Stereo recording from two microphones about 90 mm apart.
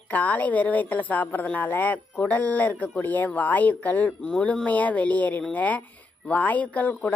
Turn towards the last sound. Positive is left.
turn(degrees=15)  # may be behind; listen again after turning